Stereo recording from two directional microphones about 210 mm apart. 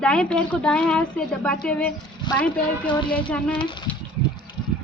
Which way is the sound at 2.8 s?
20° left (ahead or behind).